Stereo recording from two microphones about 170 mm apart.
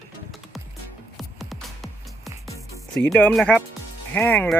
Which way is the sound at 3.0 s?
5° left (ahead or behind).